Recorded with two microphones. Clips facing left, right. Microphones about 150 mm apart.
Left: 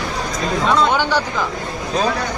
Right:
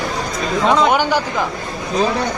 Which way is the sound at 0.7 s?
15° right (ahead or behind).